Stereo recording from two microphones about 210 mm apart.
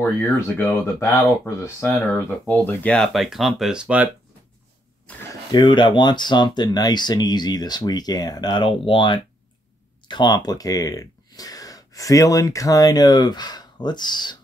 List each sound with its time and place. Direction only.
0.0 s speech: 10° left (ahead or behind); by 4.1 s 5° right (ahead or behind)
5.1 s speech: 5° left (ahead or behind)
5.5 s speech: 20° left (ahead or behind)